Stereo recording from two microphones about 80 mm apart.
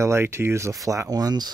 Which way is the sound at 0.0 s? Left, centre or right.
Right.